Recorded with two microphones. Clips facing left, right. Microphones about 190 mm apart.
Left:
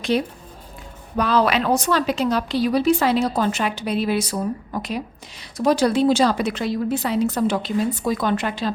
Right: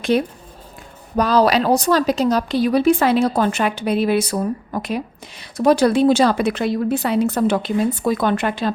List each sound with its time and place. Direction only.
1.1 s a woman's voice: 40° right (ahead or behind); by 8.7 s 55° right (ahead or behind)